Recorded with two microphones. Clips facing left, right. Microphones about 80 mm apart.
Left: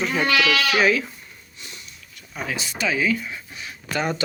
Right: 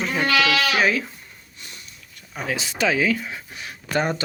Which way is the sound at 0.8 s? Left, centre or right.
Right.